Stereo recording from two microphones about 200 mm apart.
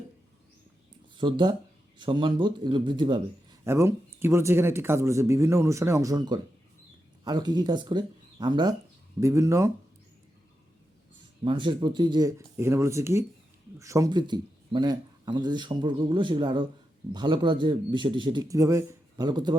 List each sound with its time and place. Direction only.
1.1 s speech: 25° right (ahead or behind)
3.6 s speech: 15° right (ahead or behind)
11.4 s speech: 25° right (ahead or behind)